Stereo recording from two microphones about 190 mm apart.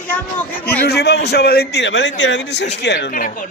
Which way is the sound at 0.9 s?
60° left (ahead or behind).